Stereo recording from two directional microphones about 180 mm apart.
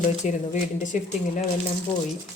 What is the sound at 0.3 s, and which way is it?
Speech, 45° left (ahead or behind).